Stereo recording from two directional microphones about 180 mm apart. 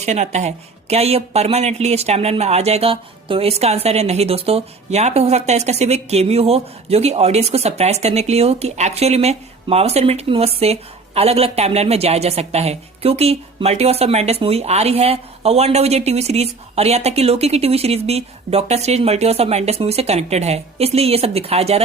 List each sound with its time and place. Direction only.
0.0 s speech: 40° right (ahead or behind)